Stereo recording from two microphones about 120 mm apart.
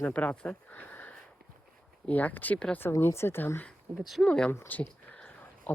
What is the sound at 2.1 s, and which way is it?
Speech, 15° left (ahead or behind).